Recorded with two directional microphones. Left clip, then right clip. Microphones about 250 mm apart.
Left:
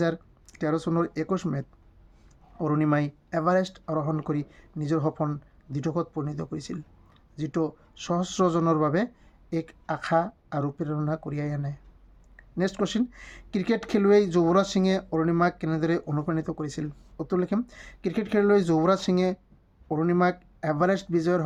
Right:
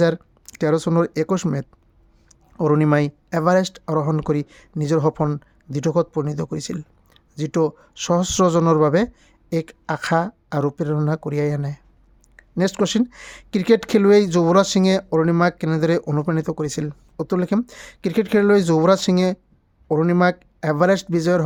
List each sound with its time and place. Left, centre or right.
0.0 s speech: right